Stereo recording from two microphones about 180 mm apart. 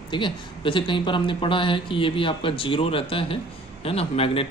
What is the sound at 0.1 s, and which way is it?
Speech, 25° left (ahead or behind).